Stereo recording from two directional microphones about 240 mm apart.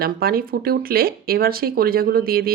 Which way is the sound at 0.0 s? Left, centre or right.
Right.